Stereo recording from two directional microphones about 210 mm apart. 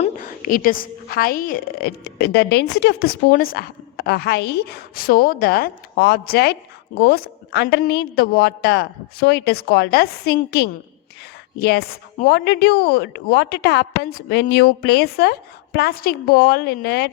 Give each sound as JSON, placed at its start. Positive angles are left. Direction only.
{"t": 0.0, "sound": "a woman's voice", "side_deg": 40}
{"t": 12.2, "sound": "a woman's voice", "side_deg": 50}